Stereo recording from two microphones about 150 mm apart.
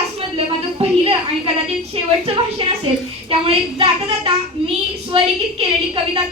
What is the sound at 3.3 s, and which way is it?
Child singing, 40° right (ahead or behind).